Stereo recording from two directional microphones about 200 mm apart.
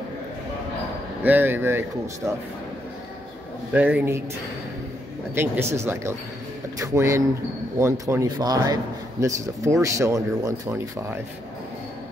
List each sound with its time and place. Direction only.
1.2 s a man's voice: 10° right (ahead or behind)
3.7 s a man's voice: 10° right (ahead or behind)
5.3 s a man's voice: 10° right (ahead or behind)